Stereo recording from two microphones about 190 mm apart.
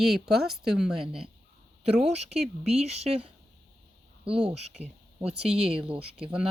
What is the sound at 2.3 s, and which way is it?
Speech, 35° right (ahead or behind).